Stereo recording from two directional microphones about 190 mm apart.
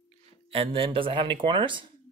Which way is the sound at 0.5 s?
30° right (ahead or behind).